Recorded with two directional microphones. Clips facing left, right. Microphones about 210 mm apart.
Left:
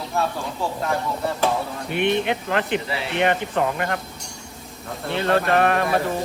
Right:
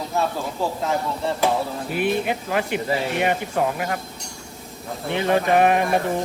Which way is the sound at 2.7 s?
45° right (ahead or behind).